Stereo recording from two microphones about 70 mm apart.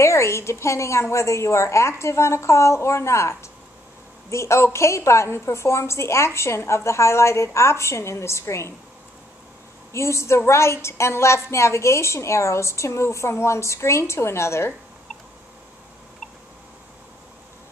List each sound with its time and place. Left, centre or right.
0.0 s a woman's voice: left
9.9 s a woman's voice: left